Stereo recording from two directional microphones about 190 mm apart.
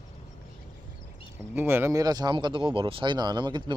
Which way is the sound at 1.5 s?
10° right (ahead or behind).